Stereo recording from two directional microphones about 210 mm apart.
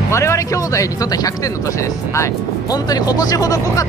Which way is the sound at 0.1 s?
15° left (ahead or behind).